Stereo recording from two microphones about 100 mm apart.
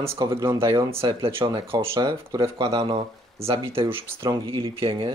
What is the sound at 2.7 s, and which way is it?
Speech, 70° right (ahead or behind).